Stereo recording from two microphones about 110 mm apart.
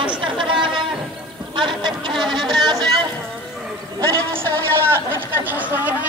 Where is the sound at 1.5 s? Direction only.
45° right (ahead or behind).